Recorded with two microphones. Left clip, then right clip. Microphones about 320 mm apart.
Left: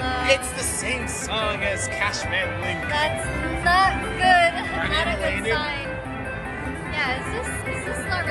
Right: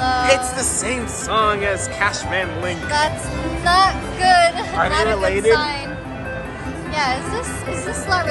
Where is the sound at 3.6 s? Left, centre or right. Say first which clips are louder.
Right 4 dB; centre.